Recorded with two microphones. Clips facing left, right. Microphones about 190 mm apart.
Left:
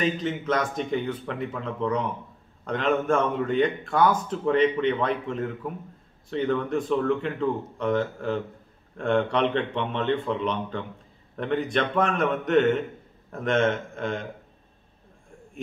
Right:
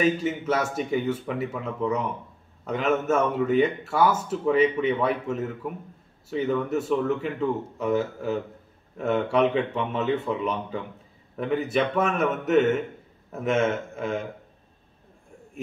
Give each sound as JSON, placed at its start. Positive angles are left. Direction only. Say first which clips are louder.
{"t": 0.0, "sound": "a man's voice", "louder": "right 3 dB", "side_deg": -10}